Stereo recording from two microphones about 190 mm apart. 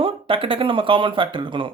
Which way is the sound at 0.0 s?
30° right (ahead or behind).